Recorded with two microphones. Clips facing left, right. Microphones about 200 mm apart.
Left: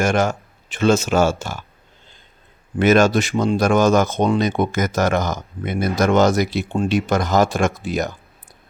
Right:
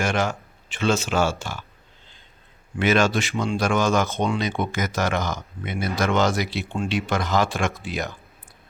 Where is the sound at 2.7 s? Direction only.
45° left (ahead or behind).